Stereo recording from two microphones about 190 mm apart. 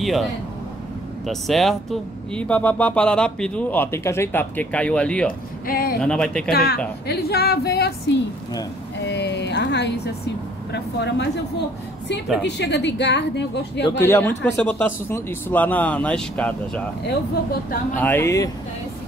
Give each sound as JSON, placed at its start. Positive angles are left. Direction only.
{"t": 0.0, "sound": "speech", "side_deg": 0}
{"t": 5.7, "sound": "speech", "side_deg": 50}
{"t": 5.9, "sound": "speech", "side_deg": 5}
{"t": 6.5, "sound": "a woman's voice", "side_deg": 50}
{"t": 12.4, "sound": "a woman's voice", "side_deg": 65}
{"t": 14.0, "sound": "speech", "side_deg": 10}
{"t": 17.9, "sound": "speech", "side_deg": 10}